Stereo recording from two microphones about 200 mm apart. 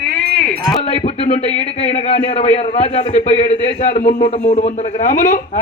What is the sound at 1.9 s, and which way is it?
A man's voice, 35° left (ahead or behind).